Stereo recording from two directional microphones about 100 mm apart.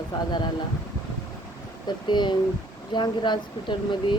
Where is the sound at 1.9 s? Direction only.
50° left (ahead or behind).